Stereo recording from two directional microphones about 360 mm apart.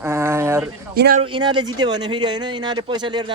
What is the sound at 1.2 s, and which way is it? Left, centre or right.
Speech, centre.